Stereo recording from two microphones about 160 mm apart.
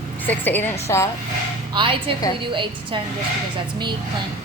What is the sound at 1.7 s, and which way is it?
A woman's voice, 35° right (ahead or behind).